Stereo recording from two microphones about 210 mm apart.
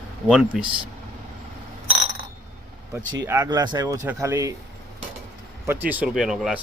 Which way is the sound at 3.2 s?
15° right (ahead or behind).